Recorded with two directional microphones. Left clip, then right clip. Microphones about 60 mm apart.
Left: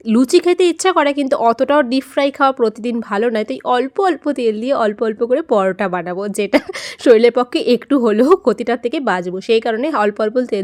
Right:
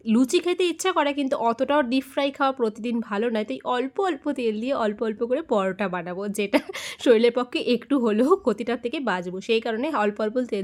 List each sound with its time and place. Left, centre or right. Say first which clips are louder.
0.1 s speech: left 9 dB; left